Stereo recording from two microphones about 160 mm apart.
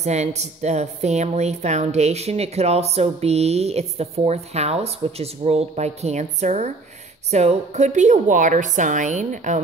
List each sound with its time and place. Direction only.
0.0 s a woman's voice: 45° right (ahead or behind)